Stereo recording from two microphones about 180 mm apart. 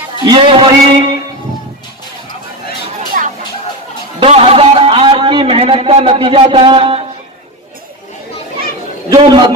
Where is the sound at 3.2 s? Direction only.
45° right (ahead or behind).